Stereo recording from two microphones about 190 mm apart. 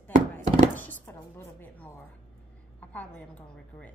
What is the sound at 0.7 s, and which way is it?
Chopping, 10° left (ahead or behind).